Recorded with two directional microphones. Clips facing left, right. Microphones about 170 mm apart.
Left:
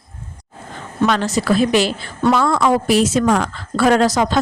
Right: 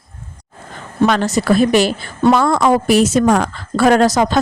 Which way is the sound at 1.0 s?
45° right (ahead or behind).